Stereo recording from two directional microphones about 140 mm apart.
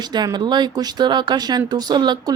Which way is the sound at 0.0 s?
30° right (ahead or behind).